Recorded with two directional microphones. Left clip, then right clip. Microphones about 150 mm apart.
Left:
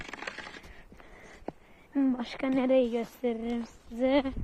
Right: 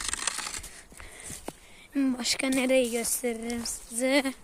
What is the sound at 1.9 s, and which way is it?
Speech, 20° right (ahead or behind).